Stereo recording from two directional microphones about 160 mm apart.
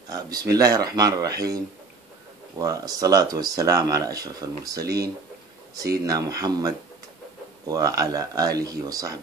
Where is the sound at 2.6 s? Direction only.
20° right (ahead or behind).